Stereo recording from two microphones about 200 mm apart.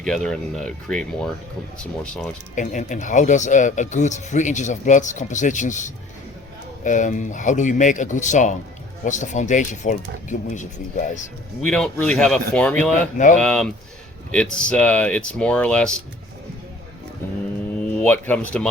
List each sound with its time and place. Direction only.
0.0 s speech: 5° left (ahead or behind)
2.6 s speech: 40° left (ahead or behind)
11.6 s speech: 5° left (ahead or behind)
17.7 s speech: 5° left (ahead or behind)